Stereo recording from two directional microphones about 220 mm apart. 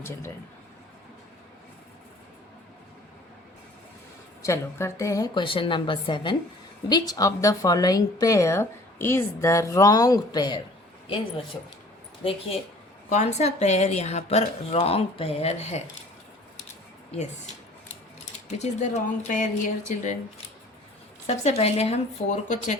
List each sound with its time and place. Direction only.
4.4 s a woman's voice: 15° left (ahead or behind)
12.2 s speech: 25° left (ahead or behind)
17.1 s speech: 30° left (ahead or behind)
21.2 s speech: 30° left (ahead or behind)